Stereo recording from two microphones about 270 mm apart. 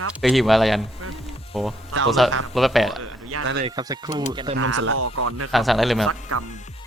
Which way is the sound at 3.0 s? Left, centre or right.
Right.